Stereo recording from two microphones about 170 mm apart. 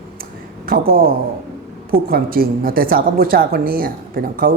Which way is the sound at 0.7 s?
60° right (ahead or behind).